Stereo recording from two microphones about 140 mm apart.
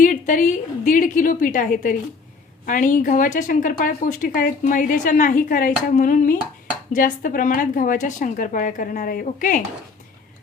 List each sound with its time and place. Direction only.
0.0 s speech: 70° left (ahead or behind)